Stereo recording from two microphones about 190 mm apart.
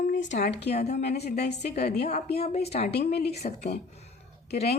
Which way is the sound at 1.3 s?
60° left (ahead or behind).